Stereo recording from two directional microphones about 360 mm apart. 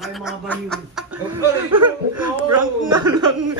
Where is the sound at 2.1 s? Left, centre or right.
Right.